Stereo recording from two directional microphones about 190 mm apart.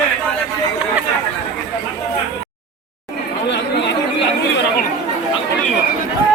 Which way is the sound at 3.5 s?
65° left (ahead or behind).